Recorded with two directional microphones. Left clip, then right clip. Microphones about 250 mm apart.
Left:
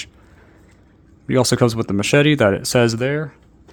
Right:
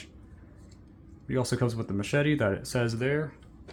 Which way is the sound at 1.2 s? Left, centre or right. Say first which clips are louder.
Left 13 dB; left.